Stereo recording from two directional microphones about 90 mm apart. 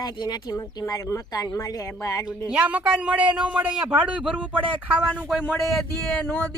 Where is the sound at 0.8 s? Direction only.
35° left (ahead or behind).